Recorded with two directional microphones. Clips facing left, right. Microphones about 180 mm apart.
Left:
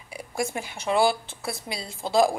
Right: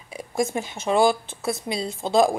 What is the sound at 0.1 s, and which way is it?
Speech, 20° right (ahead or behind).